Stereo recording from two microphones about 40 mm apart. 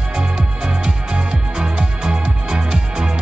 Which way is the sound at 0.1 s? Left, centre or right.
Centre.